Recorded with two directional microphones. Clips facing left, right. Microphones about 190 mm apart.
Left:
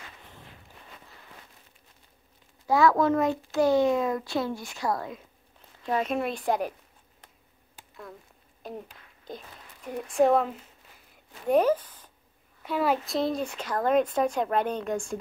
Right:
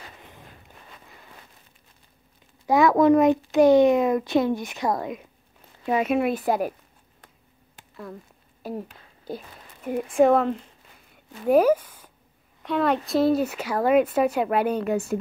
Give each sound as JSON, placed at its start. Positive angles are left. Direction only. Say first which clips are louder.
{"t": 2.6, "sound": "a child's voice", "louder": "right 4 dB", "side_deg": -15}
{"t": 5.9, "sound": "speech", "louder": "right 5 dB", "side_deg": -10}
{"t": 8.6, "sound": "speech", "louder": "right 6 dB", "side_deg": -5}
{"t": 9.9, "sound": "speech", "louder": "right 4 dB", "side_deg": 0}
{"t": 12.6, "sound": "a child's voice", "louder": "right 3 dB", "side_deg": 5}